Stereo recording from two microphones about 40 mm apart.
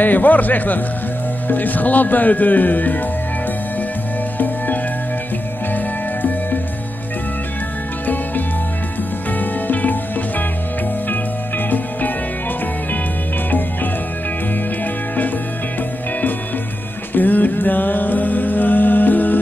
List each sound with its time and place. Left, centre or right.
0.0 s a man's voice: left
9.4 s music: left
11.1 s music: left
17.1 s music: left